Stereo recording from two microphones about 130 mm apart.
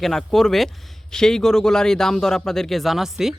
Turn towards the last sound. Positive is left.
turn(degrees=-5)  # may be behind; listen again after turning